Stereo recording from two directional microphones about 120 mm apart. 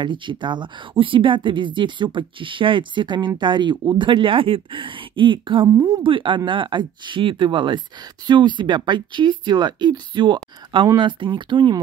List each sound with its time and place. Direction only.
0.0 s speech: 40° right (ahead or behind)